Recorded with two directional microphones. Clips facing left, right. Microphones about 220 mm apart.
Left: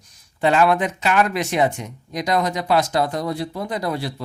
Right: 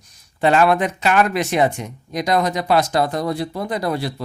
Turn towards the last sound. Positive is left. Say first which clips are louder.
# right 2 dB
turn(degrees=-65)  # may be behind; listen again after turning